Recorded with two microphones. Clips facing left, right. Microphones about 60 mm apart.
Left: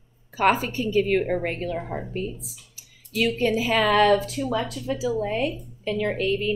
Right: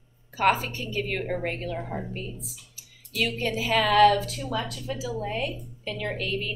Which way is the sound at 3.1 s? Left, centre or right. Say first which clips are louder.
Left 5 dB; centre.